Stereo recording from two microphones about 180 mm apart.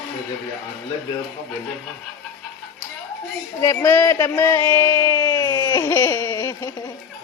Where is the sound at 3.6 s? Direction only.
15° left (ahead or behind).